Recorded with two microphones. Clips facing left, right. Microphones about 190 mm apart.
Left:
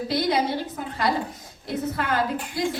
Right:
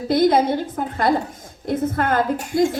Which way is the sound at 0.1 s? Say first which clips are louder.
Right 8 dB; 50° right (ahead or behind).